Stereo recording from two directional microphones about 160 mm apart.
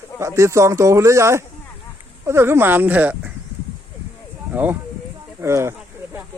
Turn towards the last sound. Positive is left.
turn(degrees=-15)  # may be behind; listen again after turning